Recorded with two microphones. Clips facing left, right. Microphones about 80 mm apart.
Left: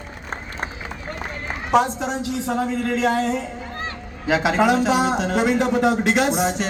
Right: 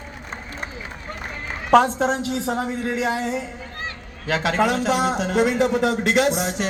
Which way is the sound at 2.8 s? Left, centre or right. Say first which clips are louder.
Left 5 dB; centre.